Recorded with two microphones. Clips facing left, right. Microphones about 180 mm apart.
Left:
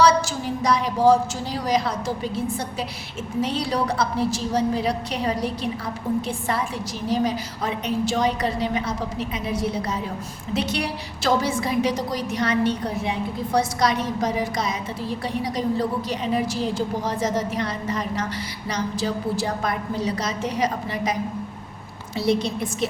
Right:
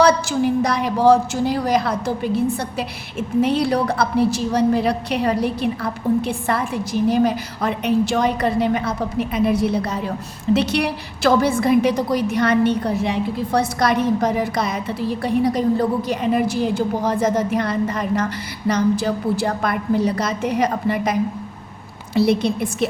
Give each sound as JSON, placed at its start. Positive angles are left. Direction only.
{"t": 0.0, "sound": "a woman's voice", "side_deg": -60}